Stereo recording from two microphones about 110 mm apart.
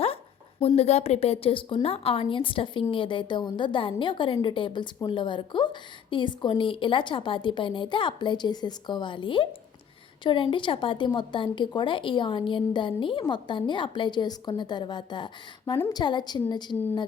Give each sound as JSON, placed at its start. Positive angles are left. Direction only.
{"t": 0.8, "sound": "a woman's voice", "side_deg": 75}